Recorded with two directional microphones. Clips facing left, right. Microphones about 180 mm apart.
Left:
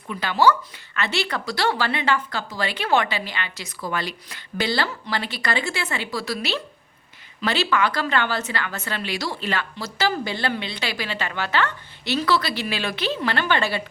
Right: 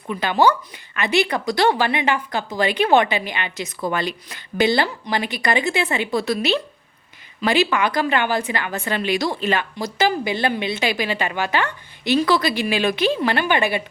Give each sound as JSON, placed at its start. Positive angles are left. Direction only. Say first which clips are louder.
{"t": 0.1, "sound": "a woman's voice", "louder": "right 2 dB", "side_deg": -20}